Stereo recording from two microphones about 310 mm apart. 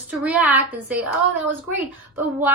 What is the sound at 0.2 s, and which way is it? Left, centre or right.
Speech, centre.